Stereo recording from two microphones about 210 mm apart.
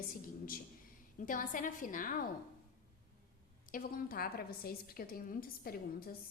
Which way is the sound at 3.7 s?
45° left (ahead or behind).